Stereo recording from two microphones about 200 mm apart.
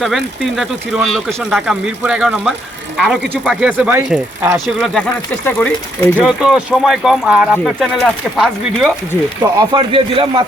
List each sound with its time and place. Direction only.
0.0 s speech: centre (ahead or behind)
6.1 s speech: 5° right (ahead or behind)
9.4 s a man's voice: 20° right (ahead or behind)